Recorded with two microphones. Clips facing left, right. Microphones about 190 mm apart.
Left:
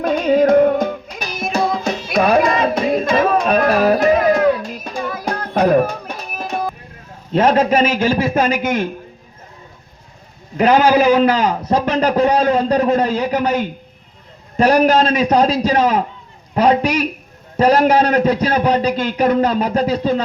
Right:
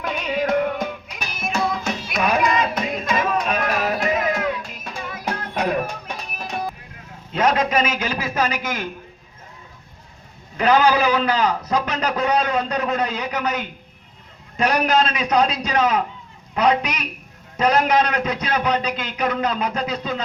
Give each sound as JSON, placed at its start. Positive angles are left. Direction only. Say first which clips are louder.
{"t": 0.0, "sound": "music", "louder": "left 10 dB", "side_deg": 45}
{"t": 7.3, "sound": "a man's voice", "louder": "left 6 dB", "side_deg": 30}
{"t": 8.3, "sound": "a man's voice", "louder": "left 6 dB", "side_deg": 50}
{"t": 10.6, "sound": "a man's voice", "louder": "left 5 dB", "side_deg": 40}
{"t": 11.9, "sound": "a man's voice", "louder": "left 10 dB", "side_deg": 30}